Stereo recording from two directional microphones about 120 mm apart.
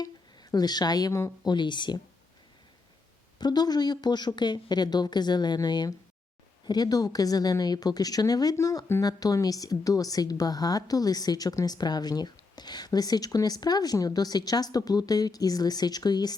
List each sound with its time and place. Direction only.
0.5 s speech: 35° left (ahead or behind)
1.5 s speech: 40° left (ahead or behind)
3.3 s speech: 35° left (ahead or behind)